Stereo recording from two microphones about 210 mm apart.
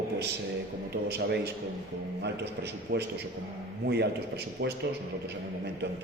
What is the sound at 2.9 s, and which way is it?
A man's voice, 55° right (ahead or behind).